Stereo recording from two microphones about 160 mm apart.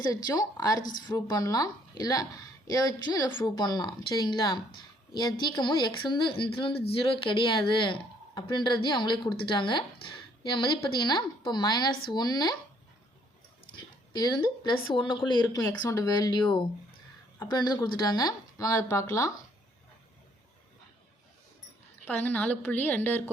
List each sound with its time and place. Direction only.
0.0 s a woman's voice: 25° left (ahead or behind)
14.1 s a woman's voice: 25° left (ahead or behind)
15.6 s a woman's voice: 15° left (ahead or behind)
22.0 s a woman's voice: 10° left (ahead or behind)